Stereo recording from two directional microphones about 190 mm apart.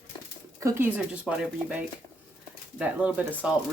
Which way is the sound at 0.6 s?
10° right (ahead or behind).